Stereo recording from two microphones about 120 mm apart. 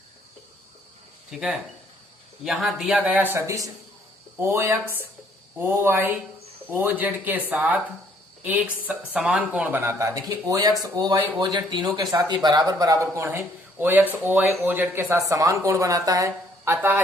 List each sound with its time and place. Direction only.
1.3 s speech: 5° right (ahead or behind); by 16.7 s 30° right (ahead or behind)